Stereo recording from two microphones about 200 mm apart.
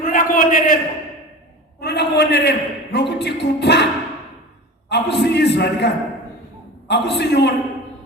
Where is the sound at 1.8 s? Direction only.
55° left (ahead or behind).